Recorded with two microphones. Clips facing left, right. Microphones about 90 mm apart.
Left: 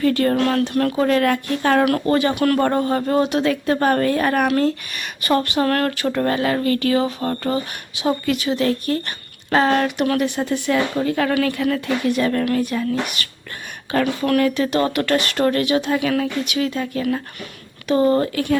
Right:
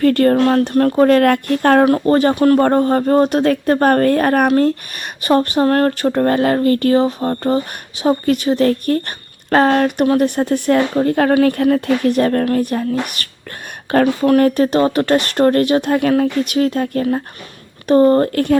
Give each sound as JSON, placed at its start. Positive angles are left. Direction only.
{"t": 0.0, "sound": "speech", "side_deg": -50}
{"t": 0.3, "sound": "speech", "side_deg": -35}
{"t": 1.8, "sound": "speech", "side_deg": -35}